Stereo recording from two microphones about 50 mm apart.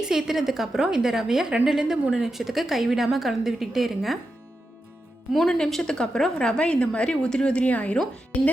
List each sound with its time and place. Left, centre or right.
0.0 s a woman's voice: centre
5.6 s a woman's voice: centre; by 7.9 s left